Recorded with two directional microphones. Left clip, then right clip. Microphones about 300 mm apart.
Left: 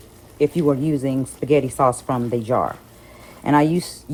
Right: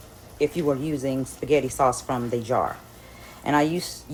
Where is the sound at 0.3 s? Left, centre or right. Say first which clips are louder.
Left 5 dB; left.